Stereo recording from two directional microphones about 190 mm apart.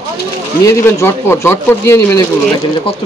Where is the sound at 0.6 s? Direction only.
15° left (ahead or behind).